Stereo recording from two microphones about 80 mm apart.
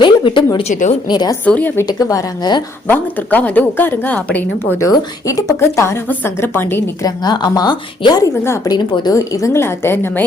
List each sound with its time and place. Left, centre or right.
0.0 s speech: left
1.0 s speech: left
1.5 s a woman's voice: left
1.9 s speech: left
2.4 s speech: left
2.8 s a woman's voice: left
4.8 s a woman's voice: left
6.4 s a woman's voice: left
7.0 s a woman's voice: left